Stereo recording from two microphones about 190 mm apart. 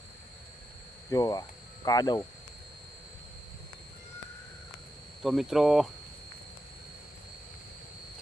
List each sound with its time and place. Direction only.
1.1 s speech: 20° left (ahead or behind)
5.2 s speech: centre (ahead or behind)